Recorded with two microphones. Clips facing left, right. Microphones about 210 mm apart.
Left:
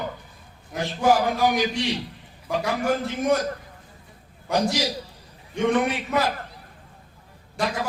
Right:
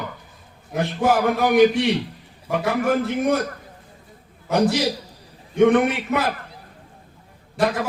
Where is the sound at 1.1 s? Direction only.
60° right (ahead or behind).